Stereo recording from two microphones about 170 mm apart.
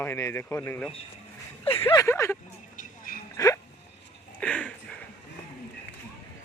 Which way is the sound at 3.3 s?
20° left (ahead or behind).